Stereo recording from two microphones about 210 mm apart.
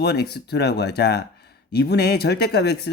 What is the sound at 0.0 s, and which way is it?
Speech, 50° left (ahead or behind).